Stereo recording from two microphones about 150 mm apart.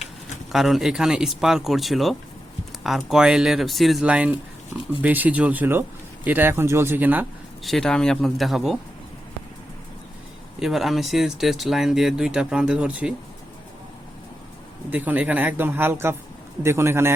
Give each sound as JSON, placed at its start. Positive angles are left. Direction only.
{"t": 0.5, "sound": "speech", "side_deg": 0}
{"t": 7.6, "sound": "speech", "side_deg": 0}
{"t": 10.6, "sound": "speech", "side_deg": 0}
{"t": 14.8, "sound": "speech", "side_deg": -10}